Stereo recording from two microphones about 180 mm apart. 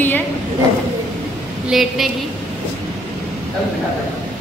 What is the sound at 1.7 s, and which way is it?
Speech, centre (ahead or behind).